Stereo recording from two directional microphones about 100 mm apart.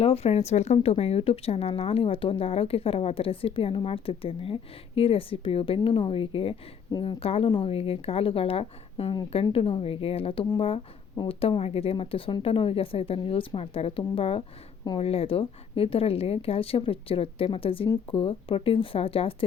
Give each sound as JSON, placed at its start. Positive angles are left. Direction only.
{"t": 0.0, "sound": "a woman's voice", "side_deg": 80}
{"t": 14.9, "sound": "a woman's voice", "side_deg": 80}